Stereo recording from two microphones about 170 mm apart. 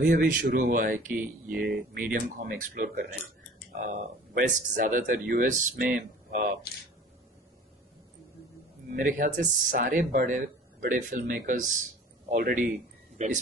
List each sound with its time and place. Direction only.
0.1 s speech: 50° right (ahead or behind)
1.1 s speech: 10° right (ahead or behind)
2.0 s speech: 50° right (ahead or behind)
3.7 s speech: 50° right (ahead or behind)
8.9 s speech: 50° right (ahead or behind)
13.2 s speech: 40° right (ahead or behind)